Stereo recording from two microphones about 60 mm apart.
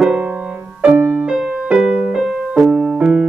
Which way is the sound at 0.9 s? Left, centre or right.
Right.